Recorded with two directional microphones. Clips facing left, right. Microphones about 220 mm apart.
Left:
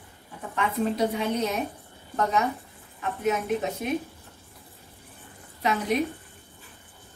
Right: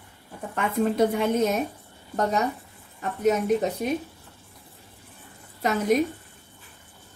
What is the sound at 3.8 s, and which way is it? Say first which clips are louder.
Speech: right 2 dB; 40° right (ahead or behind).